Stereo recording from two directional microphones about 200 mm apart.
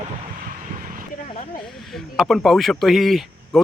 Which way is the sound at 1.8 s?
Centre (ahead or behind).